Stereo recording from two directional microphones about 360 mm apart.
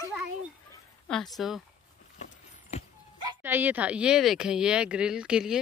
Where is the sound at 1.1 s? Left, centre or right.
Centre.